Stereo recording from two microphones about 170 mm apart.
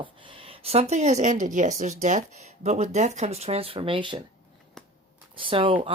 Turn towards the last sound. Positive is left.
turn(degrees=-30)  # may be behind; listen again after turning